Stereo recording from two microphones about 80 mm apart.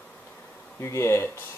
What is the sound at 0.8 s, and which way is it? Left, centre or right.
Speech, left.